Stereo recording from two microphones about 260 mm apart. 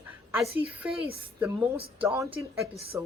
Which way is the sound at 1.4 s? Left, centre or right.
Centre.